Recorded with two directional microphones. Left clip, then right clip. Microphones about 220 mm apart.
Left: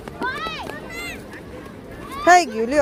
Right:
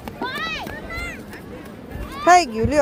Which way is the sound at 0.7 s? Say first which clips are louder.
Right 1 dB; 55° left (ahead or behind).